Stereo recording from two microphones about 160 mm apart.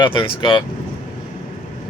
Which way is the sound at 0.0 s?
30° left (ahead or behind).